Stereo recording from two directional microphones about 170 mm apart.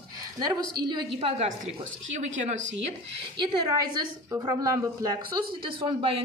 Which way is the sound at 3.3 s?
25° right (ahead or behind).